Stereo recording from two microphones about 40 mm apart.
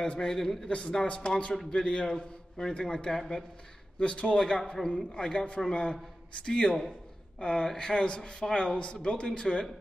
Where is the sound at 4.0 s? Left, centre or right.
Left.